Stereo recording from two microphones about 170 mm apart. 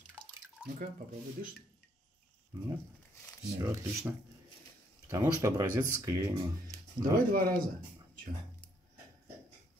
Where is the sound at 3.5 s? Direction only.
15° right (ahead or behind).